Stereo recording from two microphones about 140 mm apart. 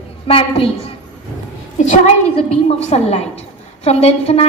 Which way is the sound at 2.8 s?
50° left (ahead or behind).